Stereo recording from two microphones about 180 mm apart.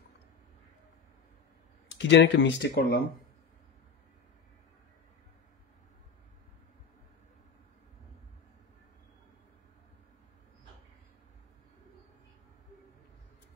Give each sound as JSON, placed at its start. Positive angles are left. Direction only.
{"t": 1.9, "sound": "speech", "side_deg": 80}